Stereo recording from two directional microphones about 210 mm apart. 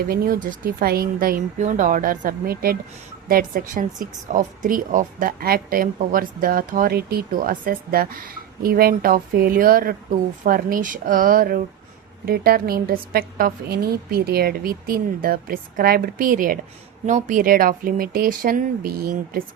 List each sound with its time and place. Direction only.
0.0 s speech: 45° right (ahead or behind)